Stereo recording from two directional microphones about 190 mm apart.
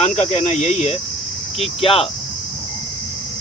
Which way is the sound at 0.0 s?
35° left (ahead or behind).